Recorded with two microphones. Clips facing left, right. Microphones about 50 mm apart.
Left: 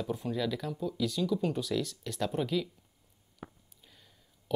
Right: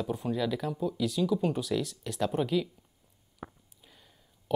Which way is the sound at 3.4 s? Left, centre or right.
Centre.